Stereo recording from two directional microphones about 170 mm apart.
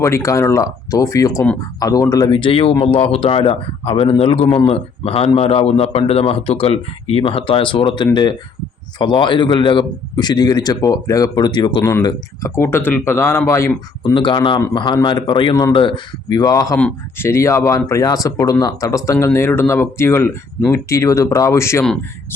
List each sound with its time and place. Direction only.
0.0 s a man's voice: 15° left (ahead or behind)
11.8 s speech: 10° left (ahead or behind)
14.0 s a man's voice: 25° left (ahead or behind)